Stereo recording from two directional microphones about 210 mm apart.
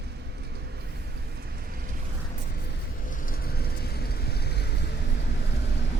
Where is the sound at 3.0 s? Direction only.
40° left (ahead or behind).